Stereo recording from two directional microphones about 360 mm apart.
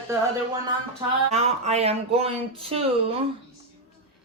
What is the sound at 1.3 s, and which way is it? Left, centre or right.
Speech, centre.